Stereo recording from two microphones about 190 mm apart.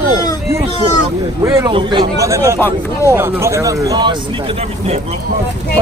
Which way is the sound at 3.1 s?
10° right (ahead or behind).